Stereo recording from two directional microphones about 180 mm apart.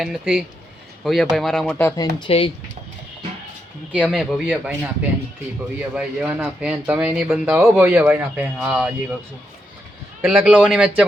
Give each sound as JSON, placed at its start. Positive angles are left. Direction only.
{"t": 0.0, "sound": "speech", "side_deg": -5}
{"t": 1.8, "sound": "speech", "side_deg": 20}
{"t": 3.9, "sound": "speech", "side_deg": -5}
{"t": 5.9, "sound": "speech", "side_deg": -5}
{"t": 10.2, "sound": "speech", "side_deg": -5}